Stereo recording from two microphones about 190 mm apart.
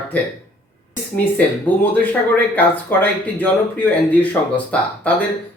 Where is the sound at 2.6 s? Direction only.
10° left (ahead or behind).